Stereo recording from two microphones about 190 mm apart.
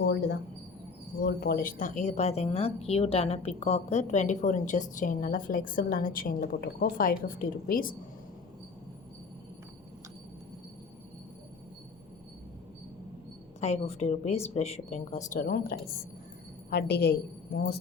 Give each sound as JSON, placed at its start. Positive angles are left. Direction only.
{"t": 0.0, "sound": "a woman's voice", "side_deg": 60}
{"t": 13.6, "sound": "a woman's voice", "side_deg": 35}